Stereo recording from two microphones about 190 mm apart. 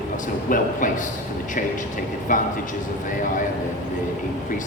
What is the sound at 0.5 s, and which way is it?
Speech, 45° left (ahead or behind).